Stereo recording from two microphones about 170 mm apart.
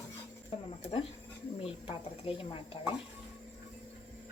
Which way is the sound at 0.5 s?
40° left (ahead or behind).